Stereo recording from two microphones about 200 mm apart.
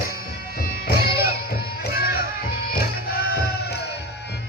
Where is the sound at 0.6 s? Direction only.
45° left (ahead or behind).